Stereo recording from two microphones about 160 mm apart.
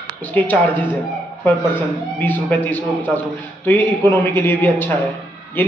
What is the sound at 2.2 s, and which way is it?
A man's voice, 10° left (ahead or behind).